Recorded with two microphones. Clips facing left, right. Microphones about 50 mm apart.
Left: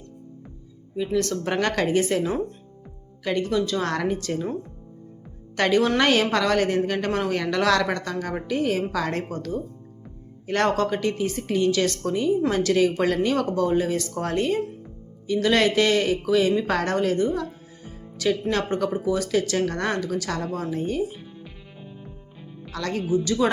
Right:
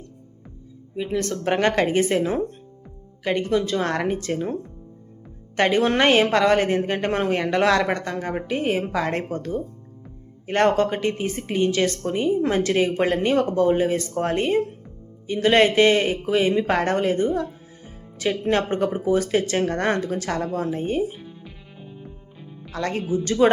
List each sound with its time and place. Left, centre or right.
0.9 s a woman's voice: right
5.5 s a woman's voice: right
22.7 s speech: right